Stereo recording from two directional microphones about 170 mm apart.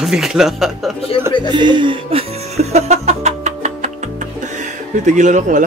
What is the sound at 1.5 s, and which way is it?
Speech, 25° right (ahead or behind).